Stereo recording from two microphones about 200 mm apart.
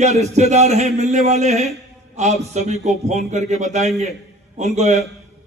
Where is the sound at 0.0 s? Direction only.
35° right (ahead or behind).